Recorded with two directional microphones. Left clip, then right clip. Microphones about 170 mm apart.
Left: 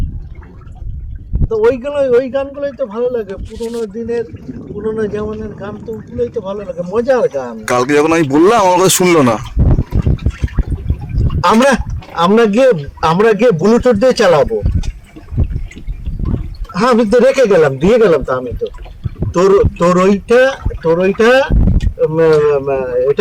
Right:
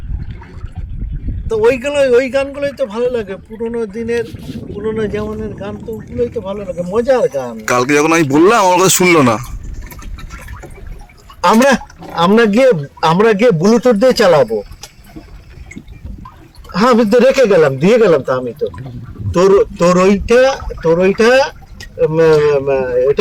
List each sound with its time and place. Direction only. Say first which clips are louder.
1.5 s a man's voice: right 1 dB; 15° right (ahead or behind)
7.6 s speech: left 1 dB; 10° left (ahead or behind)
11.4 s a man's voice: even; 5° right (ahead or behind)
16.8 s a man's voice: even; 15° right (ahead or behind)